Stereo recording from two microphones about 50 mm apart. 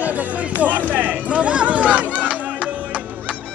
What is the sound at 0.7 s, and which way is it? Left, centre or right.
Run, right.